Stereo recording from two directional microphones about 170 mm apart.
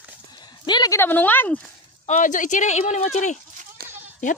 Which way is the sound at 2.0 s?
50° left (ahead or behind).